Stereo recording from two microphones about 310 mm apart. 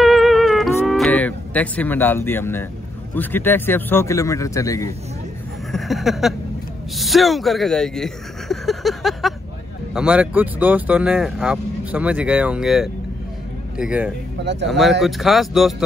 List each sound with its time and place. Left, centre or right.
0.0 s music: centre
3.2 s a man's voice: centre
5.7 s a sound: centre
7.0 s speech: centre
14.4 s a man's voice: right
15.0 s speech: centre